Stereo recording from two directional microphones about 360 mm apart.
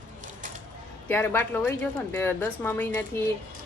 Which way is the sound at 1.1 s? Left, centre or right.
Centre.